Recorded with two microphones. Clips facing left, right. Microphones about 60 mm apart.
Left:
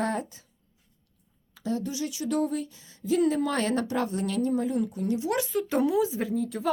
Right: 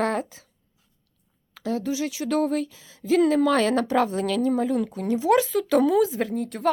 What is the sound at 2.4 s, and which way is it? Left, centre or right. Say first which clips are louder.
Speech: right 5 dB; right.